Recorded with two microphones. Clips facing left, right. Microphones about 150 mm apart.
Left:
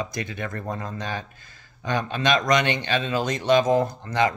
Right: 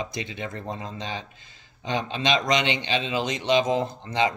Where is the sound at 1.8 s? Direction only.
50° left (ahead or behind).